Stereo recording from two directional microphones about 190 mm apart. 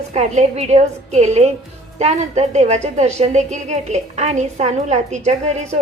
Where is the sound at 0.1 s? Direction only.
35° right (ahead or behind).